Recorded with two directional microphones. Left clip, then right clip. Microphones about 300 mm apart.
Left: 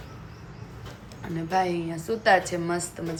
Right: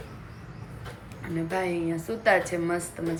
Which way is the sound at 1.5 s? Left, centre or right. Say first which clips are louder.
Left 4 dB; centre.